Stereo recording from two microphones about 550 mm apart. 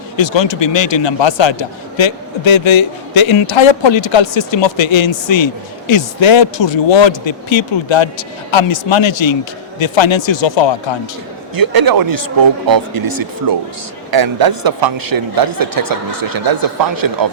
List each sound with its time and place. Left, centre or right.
0.2 s a man's voice: left
11.5 s a man's voice: right